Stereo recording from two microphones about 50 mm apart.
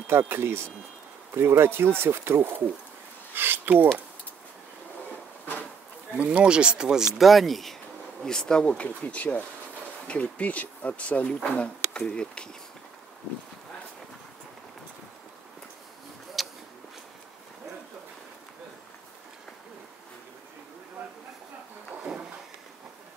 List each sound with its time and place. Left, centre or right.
0.0 s speech: right
5.4 s a sound: left
6.1 s speech: right
6.4 s speech: centre
7.2 s speech: centre
8.2 s bee: centre
8.6 s speech: left
16.4 s a sound: centre